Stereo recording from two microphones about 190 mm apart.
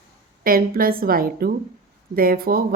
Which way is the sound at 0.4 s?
50° right (ahead or behind).